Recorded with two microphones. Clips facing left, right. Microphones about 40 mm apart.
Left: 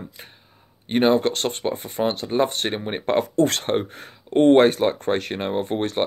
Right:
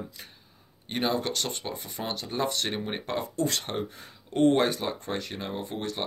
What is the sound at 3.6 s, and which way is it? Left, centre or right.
Speech, left.